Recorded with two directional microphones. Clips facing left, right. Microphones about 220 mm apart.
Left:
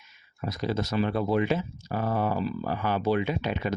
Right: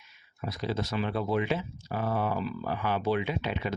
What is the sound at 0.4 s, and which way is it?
Speech, 45° left (ahead or behind).